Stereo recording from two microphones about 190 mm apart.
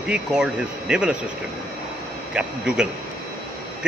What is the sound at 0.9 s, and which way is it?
Speech, 5° right (ahead or behind).